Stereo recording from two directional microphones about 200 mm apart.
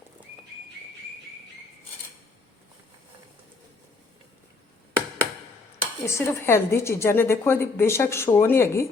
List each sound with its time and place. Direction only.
5.8 s speech: 15° left (ahead or behind)